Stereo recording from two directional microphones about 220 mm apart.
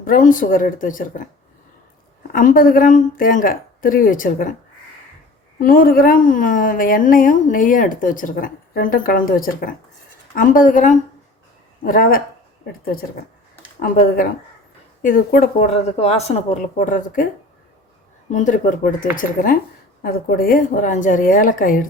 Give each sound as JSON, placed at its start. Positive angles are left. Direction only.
{"t": 0.0, "sound": "a woman's voice", "side_deg": 40}
{"t": 2.3, "sound": "a woman's voice", "side_deg": 40}
{"t": 5.5, "sound": "a woman's voice", "side_deg": 40}
{"t": 18.3, "sound": "a woman's voice", "side_deg": 35}